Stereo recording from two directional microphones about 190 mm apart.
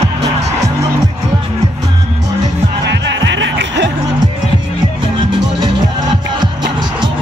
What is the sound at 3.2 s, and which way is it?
Music, 70° right (ahead or behind).